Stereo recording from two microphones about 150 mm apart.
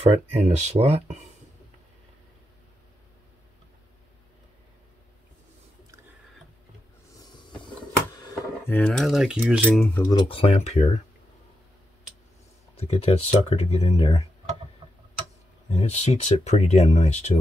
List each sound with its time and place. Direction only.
0.1 s speech: 45° right (ahead or behind)
8.2 s a sound: 25° left (ahead or behind)
8.7 s cutlery: 5° left (ahead or behind)
9.7 s cutlery: 5° left (ahead or behind)
10.0 s speech: 35° left (ahead or behind)
12.7 s speech: 40° left (ahead or behind)
15.7 s speech: 45° left (ahead or behind)